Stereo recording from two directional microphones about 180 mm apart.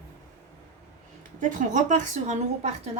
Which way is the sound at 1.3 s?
45° right (ahead or behind).